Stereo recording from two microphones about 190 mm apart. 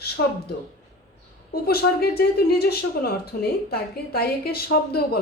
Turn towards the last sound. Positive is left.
turn(degrees=55)  # may be behind; listen again after turning